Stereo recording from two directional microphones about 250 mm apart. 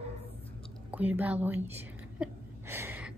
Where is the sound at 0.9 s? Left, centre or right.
Centre.